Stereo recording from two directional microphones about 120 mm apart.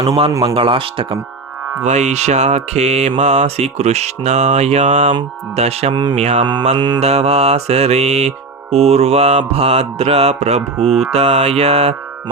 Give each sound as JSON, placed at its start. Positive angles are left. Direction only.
{"t": 0.4, "sound": "speech", "side_deg": -45}
{"t": 1.8, "sound": "mantra", "side_deg": -70}
{"t": 5.5, "sound": "mantra", "side_deg": -60}
{"t": 5.9, "sound": "speech", "side_deg": -40}
{"t": 6.1, "sound": "mantra", "side_deg": -65}
{"t": 6.4, "sound": "speech", "side_deg": -45}
{"t": 7.0, "sound": "mantra", "side_deg": -60}